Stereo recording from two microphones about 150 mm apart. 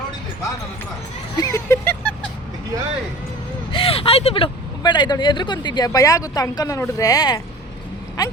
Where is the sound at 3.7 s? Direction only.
35° left (ahead or behind).